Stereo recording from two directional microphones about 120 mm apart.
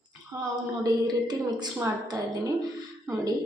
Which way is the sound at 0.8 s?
35° right (ahead or behind).